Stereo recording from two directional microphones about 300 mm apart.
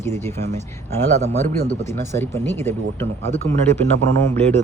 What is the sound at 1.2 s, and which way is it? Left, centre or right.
Speech, right.